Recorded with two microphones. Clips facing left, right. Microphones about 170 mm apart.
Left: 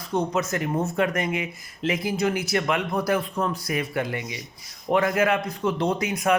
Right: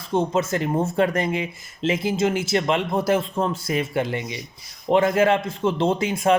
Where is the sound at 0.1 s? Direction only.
30° right (ahead or behind).